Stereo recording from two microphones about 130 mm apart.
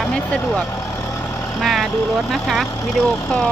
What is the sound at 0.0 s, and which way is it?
Speech, 10° left (ahead or behind).